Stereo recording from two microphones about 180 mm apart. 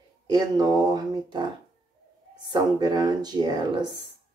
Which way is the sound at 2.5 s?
25° right (ahead or behind).